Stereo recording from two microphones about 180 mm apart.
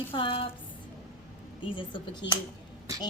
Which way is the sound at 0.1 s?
30° left (ahead or behind).